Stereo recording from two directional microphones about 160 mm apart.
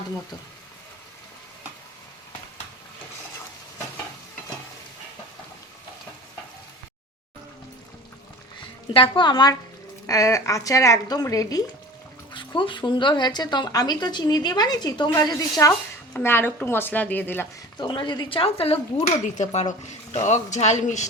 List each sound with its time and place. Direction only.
8.9 s a woman's voice: 30° left (ahead or behind); by 17.5 s 15° left (ahead or behind)
17.7 s a woman's voice: 30° left (ahead or behind); by 21.1 s 45° left (ahead or behind)